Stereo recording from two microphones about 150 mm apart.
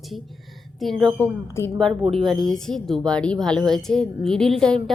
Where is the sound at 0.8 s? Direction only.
5° left (ahead or behind).